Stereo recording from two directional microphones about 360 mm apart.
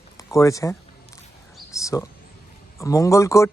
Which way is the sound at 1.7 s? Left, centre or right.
Centre.